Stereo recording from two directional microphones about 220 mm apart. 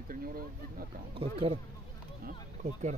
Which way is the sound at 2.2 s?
35° right (ahead or behind).